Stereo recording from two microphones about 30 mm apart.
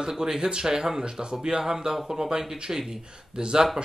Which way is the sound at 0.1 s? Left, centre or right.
Centre.